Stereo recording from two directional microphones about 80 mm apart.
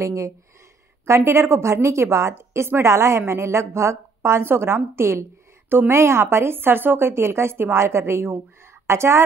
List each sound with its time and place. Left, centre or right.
0.0 s a woman's voice: right